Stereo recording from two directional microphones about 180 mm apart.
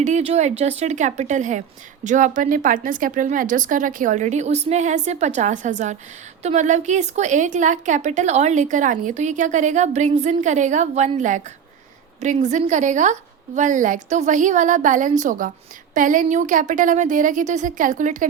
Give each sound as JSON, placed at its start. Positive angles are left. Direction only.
{"t": 0.0, "sound": "a woman's voice", "side_deg": -40}